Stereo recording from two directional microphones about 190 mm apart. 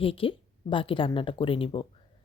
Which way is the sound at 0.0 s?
30° left (ahead or behind).